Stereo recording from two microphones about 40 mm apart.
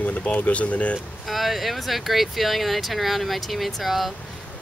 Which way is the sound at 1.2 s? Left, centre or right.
Centre.